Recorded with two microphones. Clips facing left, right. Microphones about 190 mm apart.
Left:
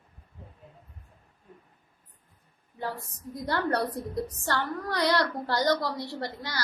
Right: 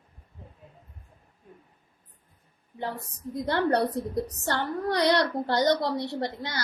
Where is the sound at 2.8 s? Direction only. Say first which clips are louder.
Right 1 dB; 20° right (ahead or behind).